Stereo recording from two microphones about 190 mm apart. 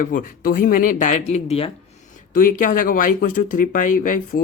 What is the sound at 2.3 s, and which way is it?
Speech, 45° left (ahead or behind).